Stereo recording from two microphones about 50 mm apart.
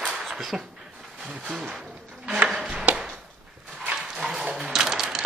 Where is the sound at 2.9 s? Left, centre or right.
Right.